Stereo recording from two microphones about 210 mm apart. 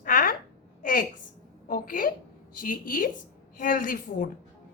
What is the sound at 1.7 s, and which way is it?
A woman's voice, 40° left (ahead or behind).